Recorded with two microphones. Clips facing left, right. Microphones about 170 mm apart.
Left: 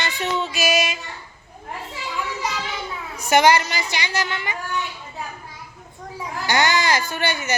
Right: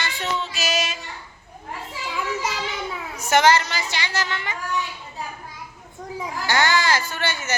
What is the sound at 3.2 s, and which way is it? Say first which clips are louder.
Speech: left 1 dB; 15° left (ahead or behind).